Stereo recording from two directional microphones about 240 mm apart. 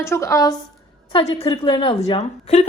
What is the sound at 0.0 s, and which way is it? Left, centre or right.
A woman's voice, centre.